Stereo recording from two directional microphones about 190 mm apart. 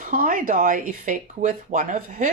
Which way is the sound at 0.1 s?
45° right (ahead or behind).